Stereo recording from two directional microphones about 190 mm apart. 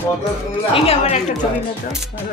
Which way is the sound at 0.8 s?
30° left (ahead or behind).